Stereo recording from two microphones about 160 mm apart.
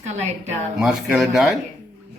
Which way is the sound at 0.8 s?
5° right (ahead or behind).